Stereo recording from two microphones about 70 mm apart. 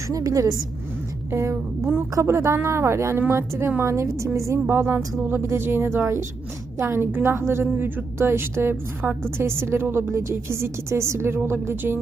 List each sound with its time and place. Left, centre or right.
0.1 s a woman's voice: right
1.3 s a woman's voice: right